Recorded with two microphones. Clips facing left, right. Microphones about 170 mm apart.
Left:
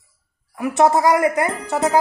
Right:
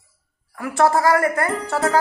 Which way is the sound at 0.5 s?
20° left (ahead or behind).